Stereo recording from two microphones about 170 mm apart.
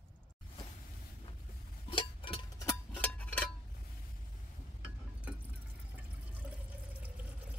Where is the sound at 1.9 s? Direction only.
30° left (ahead or behind).